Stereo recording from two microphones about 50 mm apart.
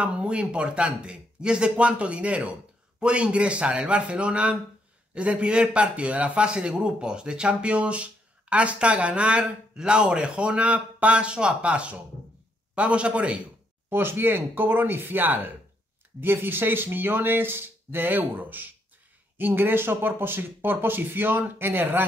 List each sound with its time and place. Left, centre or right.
0.0 s a man's voice: right
13.8 s speech: right